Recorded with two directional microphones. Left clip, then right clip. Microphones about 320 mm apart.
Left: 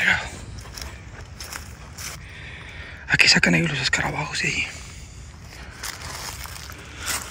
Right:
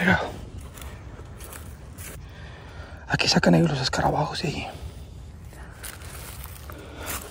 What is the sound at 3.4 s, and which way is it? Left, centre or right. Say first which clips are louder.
Speech: left 1 dB; centre.